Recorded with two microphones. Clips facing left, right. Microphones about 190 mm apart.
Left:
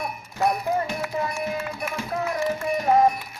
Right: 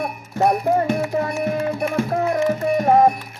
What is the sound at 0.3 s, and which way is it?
Speech, 45° right (ahead or behind).